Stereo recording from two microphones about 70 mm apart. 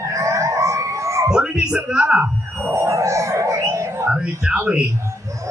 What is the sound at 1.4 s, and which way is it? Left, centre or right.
Music, centre.